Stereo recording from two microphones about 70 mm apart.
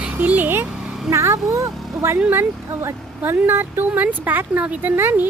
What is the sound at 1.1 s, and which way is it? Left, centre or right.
Speech, right.